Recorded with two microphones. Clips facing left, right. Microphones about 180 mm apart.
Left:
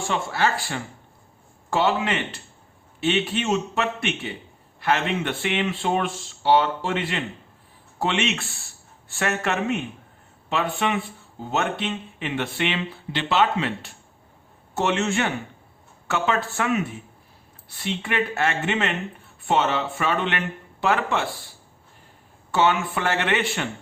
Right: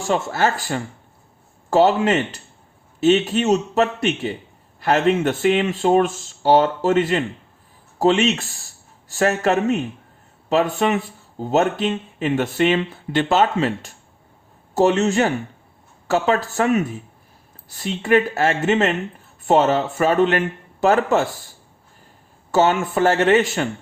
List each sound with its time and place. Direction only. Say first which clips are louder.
0.1 s speech: right 5 dB; 45° right (ahead or behind)
22.5 s speech: right 4 dB; 45° right (ahead or behind)